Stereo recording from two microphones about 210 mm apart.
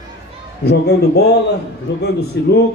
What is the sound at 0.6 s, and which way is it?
A man's voice, 50° left (ahead or behind).